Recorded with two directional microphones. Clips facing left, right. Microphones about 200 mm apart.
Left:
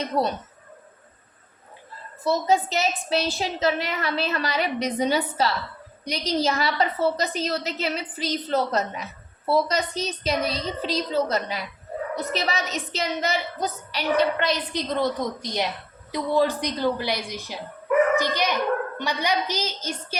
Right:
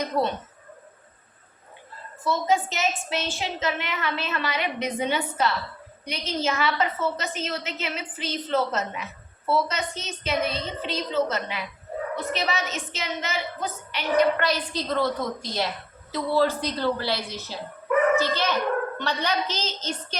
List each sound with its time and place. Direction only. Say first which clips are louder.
0.0 s a woman's voice: left 1 dB; 40° left (ahead or behind)
2.2 s a woman's voice: left 2 dB; 35° left (ahead or behind)
14.3 s a woman's voice: left 1 dB; 20° left (ahead or behind)